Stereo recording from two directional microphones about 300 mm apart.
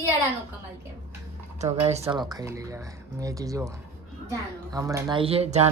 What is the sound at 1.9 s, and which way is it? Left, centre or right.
A woman's voice, centre.